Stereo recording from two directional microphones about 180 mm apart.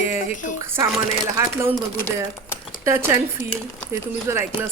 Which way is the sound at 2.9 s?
15° right (ahead or behind).